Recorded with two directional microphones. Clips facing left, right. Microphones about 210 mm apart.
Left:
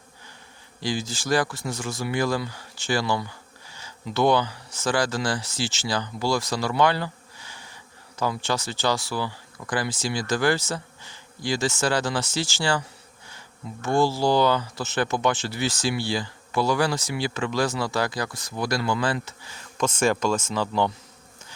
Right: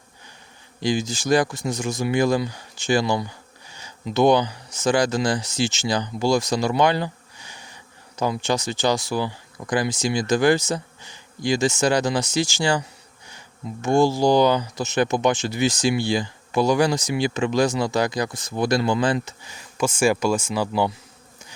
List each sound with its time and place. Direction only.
0.8 s speech: 15° right (ahead or behind)
13.8 s speech: 15° right (ahead or behind)